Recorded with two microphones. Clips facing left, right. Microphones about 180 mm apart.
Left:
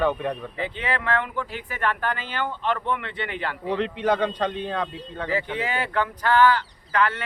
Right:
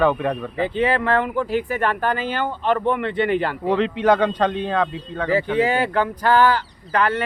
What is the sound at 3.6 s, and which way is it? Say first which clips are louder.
A man's voice: right 5 dB; 90° right.